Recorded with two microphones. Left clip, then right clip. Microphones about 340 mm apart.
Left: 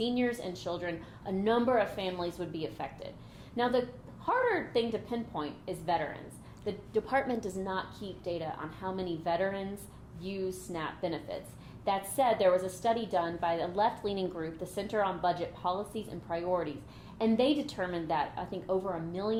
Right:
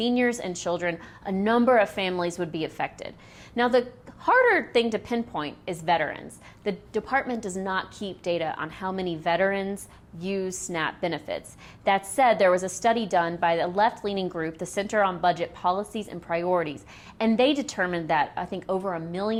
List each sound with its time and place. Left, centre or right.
0.0 s a woman's voice: right
4.3 s a woman's voice: right
7.0 s a woman's voice: right
7.6 s a woman's voice: right